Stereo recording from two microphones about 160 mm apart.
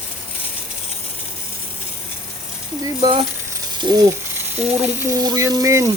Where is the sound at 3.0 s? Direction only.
30° right (ahead or behind); by 5.1 s 10° right (ahead or behind).